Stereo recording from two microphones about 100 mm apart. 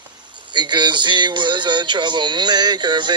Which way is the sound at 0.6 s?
45° right (ahead or behind).